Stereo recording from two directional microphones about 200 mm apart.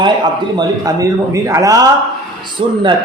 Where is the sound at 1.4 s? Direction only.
15° right (ahead or behind).